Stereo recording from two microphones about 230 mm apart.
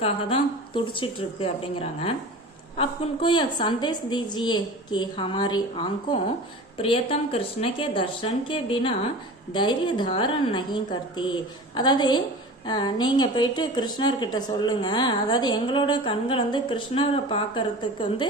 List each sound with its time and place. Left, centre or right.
0.0 s a woman's voice: left